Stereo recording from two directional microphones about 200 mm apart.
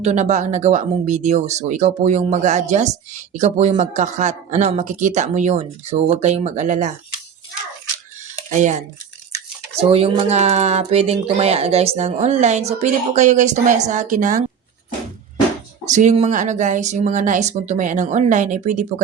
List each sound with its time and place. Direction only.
0.0 s speech: 35° right (ahead or behind)
8.5 s speech: 35° right (ahead or behind)
9.8 s speech: 30° right (ahead or behind)
15.9 s speech: 35° right (ahead or behind)